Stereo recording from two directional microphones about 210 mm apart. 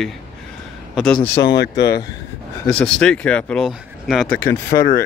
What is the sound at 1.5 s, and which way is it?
Speech, 55° left (ahead or behind).